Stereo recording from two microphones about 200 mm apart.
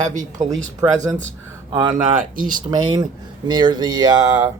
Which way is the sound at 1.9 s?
40° right (ahead or behind).